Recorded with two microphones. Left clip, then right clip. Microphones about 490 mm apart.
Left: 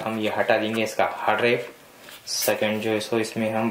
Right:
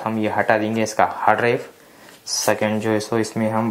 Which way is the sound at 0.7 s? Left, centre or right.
Right.